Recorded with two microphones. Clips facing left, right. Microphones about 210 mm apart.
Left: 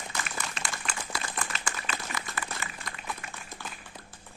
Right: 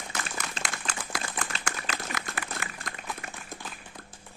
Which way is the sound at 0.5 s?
35° right (ahead or behind).